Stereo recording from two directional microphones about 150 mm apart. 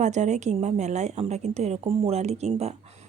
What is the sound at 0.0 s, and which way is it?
A man's voice, 50° right (ahead or behind).